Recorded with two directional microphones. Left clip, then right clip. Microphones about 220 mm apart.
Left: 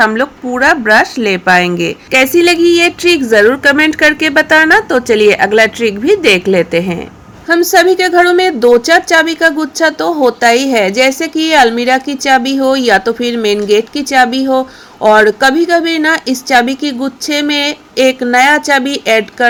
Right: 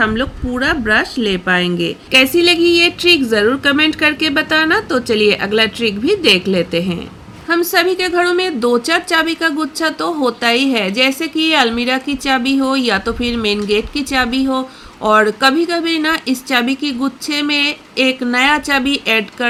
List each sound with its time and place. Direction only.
0.0 s speech: 15° left (ahead or behind)